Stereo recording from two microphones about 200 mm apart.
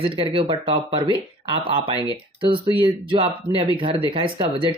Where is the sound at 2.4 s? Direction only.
25° right (ahead or behind).